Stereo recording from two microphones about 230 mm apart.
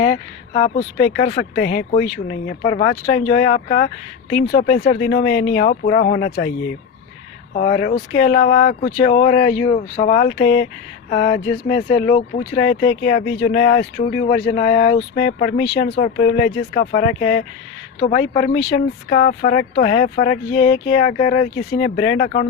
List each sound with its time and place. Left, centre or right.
0.0 s speech: left
2.6 s speech: left
7.5 s speech: left
12.5 s speech: left
18.0 s speech: left